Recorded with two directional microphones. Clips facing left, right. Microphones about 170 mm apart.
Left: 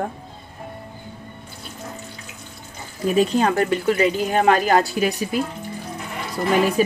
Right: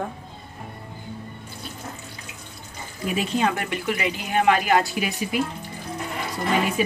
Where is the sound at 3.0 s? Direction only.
40° left (ahead or behind).